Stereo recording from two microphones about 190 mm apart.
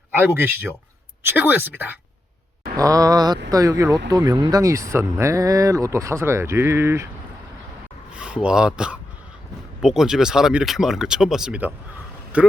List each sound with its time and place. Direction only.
0.1 s speech: 10° right (ahead or behind)
2.7 s a sound: 20° right (ahead or behind)
4.1 s speech: 20° right (ahead or behind)
8.1 s speech: 5° right (ahead or behind)